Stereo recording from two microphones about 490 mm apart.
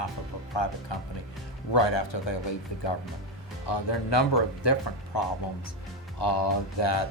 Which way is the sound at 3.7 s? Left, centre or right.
Left.